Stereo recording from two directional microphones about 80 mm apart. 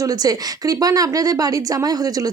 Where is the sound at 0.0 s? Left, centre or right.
Right.